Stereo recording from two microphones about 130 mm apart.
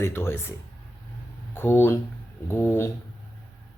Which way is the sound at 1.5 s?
15° left (ahead or behind).